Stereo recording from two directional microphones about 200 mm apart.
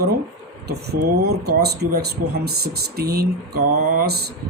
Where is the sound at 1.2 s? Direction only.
55° right (ahead or behind).